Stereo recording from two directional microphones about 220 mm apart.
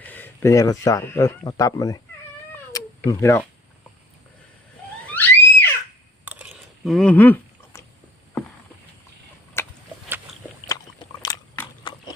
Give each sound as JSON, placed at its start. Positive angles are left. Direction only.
{"t": 0.0, "sound": "speech", "side_deg": 10}
{"t": 2.7, "sound": "cat", "side_deg": 15}
{"t": 5.0, "sound": "theremin", "side_deg": 10}
{"t": 6.2, "sound": "a sound", "side_deg": -5}
{"t": 9.6, "sound": "a sound", "side_deg": 10}
{"t": 11.8, "sound": "horse", "side_deg": 20}